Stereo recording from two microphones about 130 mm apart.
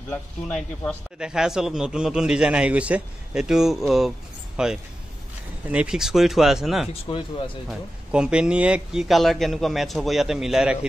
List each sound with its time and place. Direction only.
0.1 s speech: 10° left (ahead or behind)
1.2 s a man's voice: 5° right (ahead or behind)
6.9 s speech: 45° left (ahead or behind)
8.1 s a man's voice: 5° right (ahead or behind)